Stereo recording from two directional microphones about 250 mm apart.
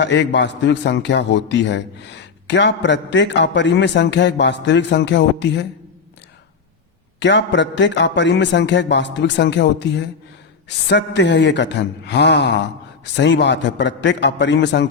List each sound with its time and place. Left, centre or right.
0.0 s a man's voice: left
7.2 s a man's voice: left